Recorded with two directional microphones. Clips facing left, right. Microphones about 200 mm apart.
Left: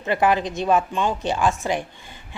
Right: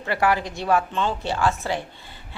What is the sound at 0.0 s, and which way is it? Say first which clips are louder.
A woman's voice: left 2 dB; 20° left (ahead or behind).